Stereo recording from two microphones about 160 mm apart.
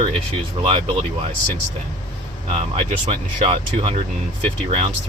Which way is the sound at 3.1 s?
35° right (ahead or behind).